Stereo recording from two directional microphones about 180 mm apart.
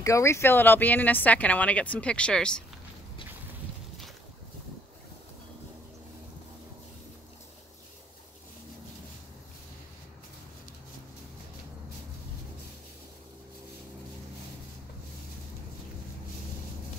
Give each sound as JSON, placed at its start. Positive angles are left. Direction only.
{"t": 0.0, "sound": "speech", "side_deg": 15}